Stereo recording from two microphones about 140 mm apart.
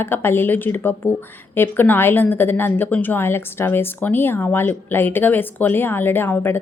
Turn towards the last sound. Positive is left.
turn(degrees=15)  # may be behind; listen again after turning